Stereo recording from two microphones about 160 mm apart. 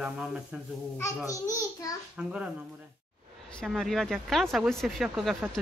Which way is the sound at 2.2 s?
5° right (ahead or behind).